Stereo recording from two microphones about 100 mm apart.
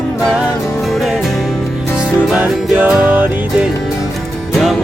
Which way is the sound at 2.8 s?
15° right (ahead or behind).